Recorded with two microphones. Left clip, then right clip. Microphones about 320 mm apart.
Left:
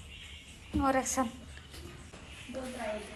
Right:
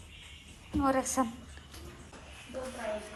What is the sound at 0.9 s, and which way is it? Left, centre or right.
Speech, centre.